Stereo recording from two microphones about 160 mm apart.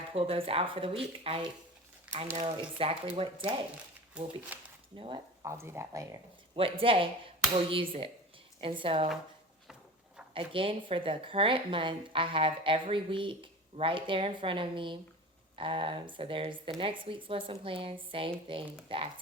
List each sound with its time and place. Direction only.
0.1 s speech: 35° right (ahead or behind)
2.1 s crumpling: 5° right (ahead or behind)
2.4 s speech: 35° right (ahead or behind)
4.1 s speech: 5° right (ahead or behind)
4.9 s speech: 35° right (ahead or behind)
5.4 s speech: 15° right (ahead or behind)
6.6 s speech: 35° right (ahead or behind)
10.3 s speech: 35° right (ahead or behind)